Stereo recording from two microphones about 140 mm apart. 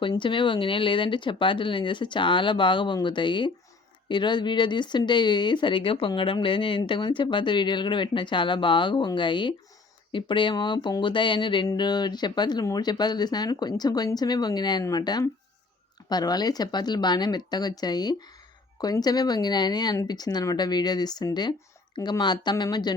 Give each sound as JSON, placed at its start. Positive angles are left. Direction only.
{"t": 0.0, "sound": "speech", "side_deg": 35}